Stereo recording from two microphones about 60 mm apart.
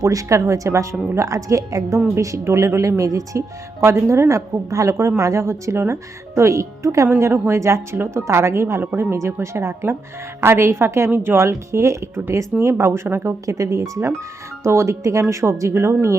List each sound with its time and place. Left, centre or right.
0.0 s a woman's voice: right
2.4 s a woman's voice: right
7.9 s speech: right
8.8 s speech: right
9.1 s speech: right
13.4 s a woman's voice: right
14.6 s speech: right